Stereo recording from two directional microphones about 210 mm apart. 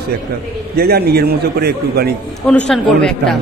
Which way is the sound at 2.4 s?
5° left (ahead or behind).